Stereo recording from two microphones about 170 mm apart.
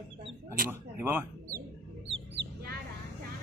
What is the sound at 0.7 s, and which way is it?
Speech, 15° right (ahead or behind).